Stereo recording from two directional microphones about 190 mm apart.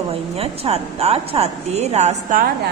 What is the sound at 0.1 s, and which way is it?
Speech, 30° right (ahead or behind).